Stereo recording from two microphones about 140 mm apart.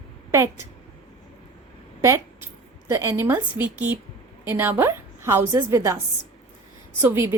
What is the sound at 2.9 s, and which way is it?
A woman's voice, 20° right (ahead or behind).